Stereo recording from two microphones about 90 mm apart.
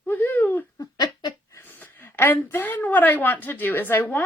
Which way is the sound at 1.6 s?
25° left (ahead or behind).